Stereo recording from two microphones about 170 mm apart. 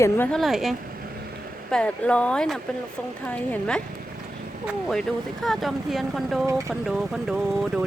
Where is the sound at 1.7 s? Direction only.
5° left (ahead or behind).